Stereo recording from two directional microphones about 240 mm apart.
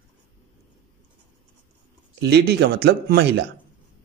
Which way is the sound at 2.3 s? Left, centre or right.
Right.